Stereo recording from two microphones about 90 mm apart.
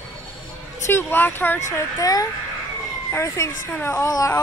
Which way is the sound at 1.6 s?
35° left (ahead or behind).